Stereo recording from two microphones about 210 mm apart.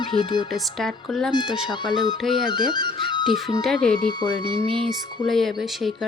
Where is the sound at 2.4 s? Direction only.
20° left (ahead or behind).